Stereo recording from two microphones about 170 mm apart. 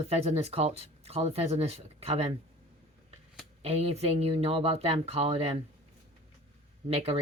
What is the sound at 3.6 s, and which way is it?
Speech, 35° right (ahead or behind).